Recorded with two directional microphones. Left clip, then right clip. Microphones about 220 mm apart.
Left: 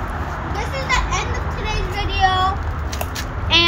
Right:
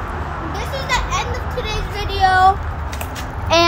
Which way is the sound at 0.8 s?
20° right (ahead or behind).